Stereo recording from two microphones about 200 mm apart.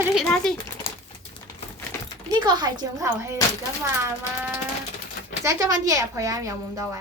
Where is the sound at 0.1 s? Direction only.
Centre (ahead or behind).